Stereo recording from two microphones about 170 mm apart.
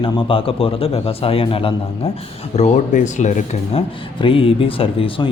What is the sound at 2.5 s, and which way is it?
Speech, 45° left (ahead or behind).